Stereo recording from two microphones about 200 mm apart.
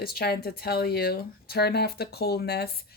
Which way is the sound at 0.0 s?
50° left (ahead or behind).